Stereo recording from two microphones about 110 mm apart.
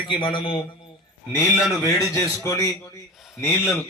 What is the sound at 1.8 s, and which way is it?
A man's voice, 30° left (ahead or behind).